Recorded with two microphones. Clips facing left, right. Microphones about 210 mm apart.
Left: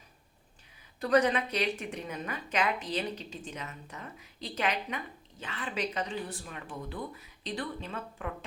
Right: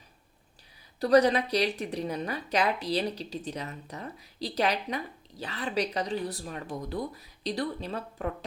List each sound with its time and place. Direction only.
0.9 s speech: 35° right (ahead or behind)